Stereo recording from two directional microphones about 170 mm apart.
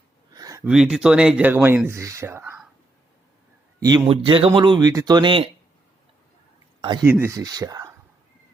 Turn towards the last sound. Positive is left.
turn(degrees=-20)  # may be behind; listen again after turning